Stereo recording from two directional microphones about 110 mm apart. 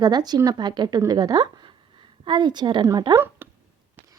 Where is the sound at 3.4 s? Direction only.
20° right (ahead or behind).